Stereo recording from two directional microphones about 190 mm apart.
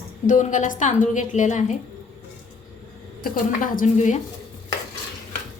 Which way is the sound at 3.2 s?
45° left (ahead or behind).